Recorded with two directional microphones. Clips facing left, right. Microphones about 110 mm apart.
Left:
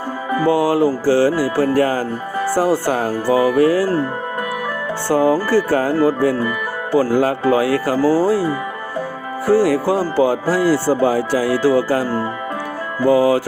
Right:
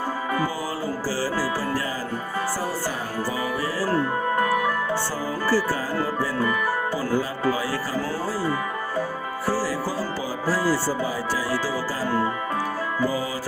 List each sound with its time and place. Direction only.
0.4 s speech: 70° left (ahead or behind)
5.0 s speech: 65° left (ahead or behind)
7.1 s speech: 70° left (ahead or behind)
8.0 s speech: 35° left (ahead or behind)
9.5 s speech: 65° left (ahead or behind)
13.1 s speech: 70° left (ahead or behind)